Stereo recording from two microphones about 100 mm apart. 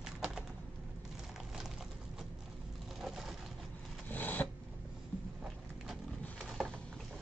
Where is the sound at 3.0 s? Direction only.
5° right (ahead or behind).